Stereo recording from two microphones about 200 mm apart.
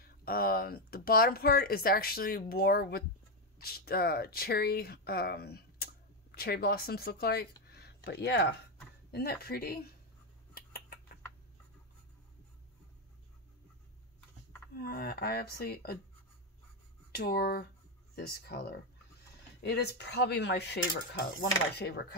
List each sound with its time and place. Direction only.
0.0 s speech: 45° left (ahead or behind)
7.7 s a sound: 55° left (ahead or behind)
9.1 s speech: 50° left (ahead or behind)
10.5 s a sound: 50° left (ahead or behind)
14.8 s speech: 50° left (ahead or behind)
17.1 s speech: 50° left (ahead or behind)